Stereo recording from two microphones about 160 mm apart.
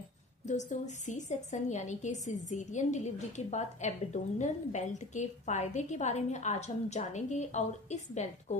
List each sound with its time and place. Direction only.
0.5 s a woman's voice: 50° left (ahead or behind)